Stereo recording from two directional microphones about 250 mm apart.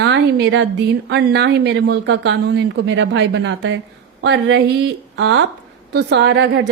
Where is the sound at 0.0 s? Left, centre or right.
Right.